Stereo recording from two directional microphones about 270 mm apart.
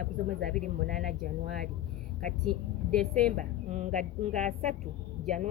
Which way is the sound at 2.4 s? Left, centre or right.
Centre.